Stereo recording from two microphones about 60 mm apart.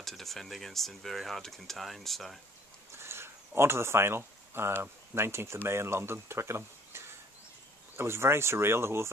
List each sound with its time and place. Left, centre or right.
0.0 s speech: centre
3.0 s a sound: right
5.1 s speech: right